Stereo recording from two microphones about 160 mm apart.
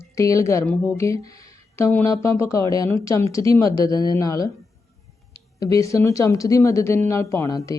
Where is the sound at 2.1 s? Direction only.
15° left (ahead or behind).